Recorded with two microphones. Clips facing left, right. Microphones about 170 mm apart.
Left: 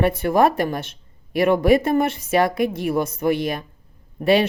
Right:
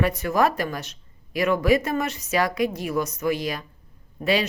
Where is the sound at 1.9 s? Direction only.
55° left (ahead or behind).